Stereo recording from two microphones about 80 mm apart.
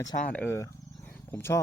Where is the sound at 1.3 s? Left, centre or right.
Left.